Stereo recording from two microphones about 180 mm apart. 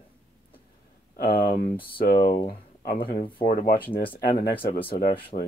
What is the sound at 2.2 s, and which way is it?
Speech, 25° left (ahead or behind).